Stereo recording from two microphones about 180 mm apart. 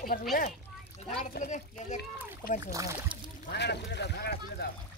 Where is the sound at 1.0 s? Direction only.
45° left (ahead or behind).